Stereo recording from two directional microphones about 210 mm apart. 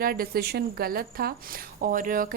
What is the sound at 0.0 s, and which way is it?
A woman's voice, 45° right (ahead or behind).